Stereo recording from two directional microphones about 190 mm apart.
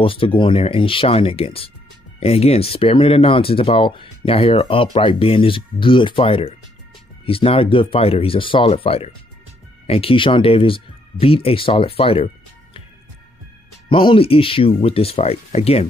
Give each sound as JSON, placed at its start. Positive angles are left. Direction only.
{"t": 0.0, "sound": "speech", "side_deg": 30}
{"t": 13.8, "sound": "speech", "side_deg": 25}